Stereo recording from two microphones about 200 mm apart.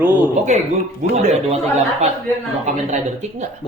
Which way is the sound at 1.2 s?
35° right (ahead or behind).